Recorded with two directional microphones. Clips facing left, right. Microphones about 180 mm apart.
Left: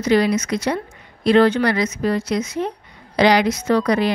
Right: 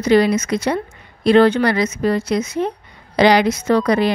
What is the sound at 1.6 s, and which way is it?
Speech, 30° right (ahead or behind).